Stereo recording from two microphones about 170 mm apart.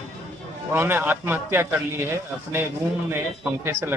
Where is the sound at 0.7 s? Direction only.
15° right (ahead or behind).